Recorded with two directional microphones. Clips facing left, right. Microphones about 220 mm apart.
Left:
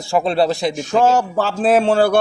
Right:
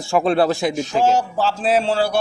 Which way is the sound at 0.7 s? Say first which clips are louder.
Left 2 dB; 50° left (ahead or behind).